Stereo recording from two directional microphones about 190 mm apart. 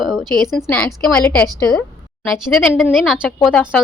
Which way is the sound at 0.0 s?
Centre (ahead or behind).